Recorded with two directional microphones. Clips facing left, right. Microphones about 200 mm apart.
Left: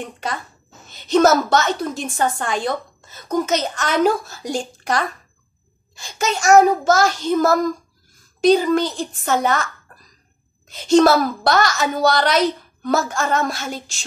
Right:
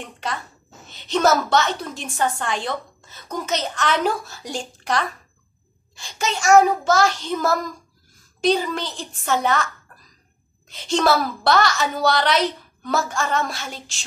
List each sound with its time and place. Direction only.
0.0 s a woman's voice: 45° left (ahead or behind)
10.7 s a woman's voice: 45° left (ahead or behind)